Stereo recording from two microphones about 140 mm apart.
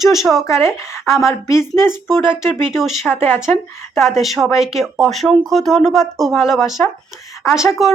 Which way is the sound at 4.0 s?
Centre (ahead or behind).